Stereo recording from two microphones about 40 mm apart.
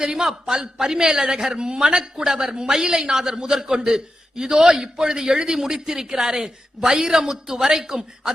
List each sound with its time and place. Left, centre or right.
0.0 s a man's voice: centre